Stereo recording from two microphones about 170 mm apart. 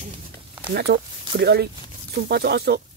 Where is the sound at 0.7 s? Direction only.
75° right (ahead or behind).